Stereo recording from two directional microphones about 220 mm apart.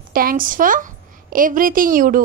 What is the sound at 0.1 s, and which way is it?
A woman's voice, 40° right (ahead or behind).